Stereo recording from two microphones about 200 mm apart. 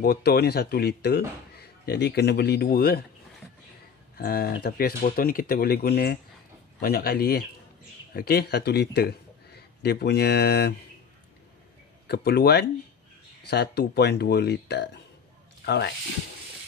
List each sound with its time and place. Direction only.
0.0 s speech: 50° left (ahead or behind)
4.2 s a man's voice: 50° left (ahead or behind)
12.1 s speech: 50° left (ahead or behind)